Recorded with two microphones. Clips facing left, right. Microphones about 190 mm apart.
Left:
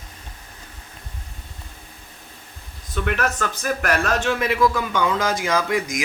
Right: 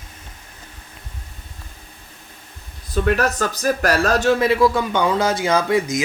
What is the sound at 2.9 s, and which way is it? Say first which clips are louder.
Speech: right 5 dB; 35° right (ahead or behind).